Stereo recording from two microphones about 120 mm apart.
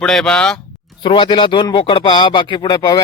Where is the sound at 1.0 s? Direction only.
45° left (ahead or behind).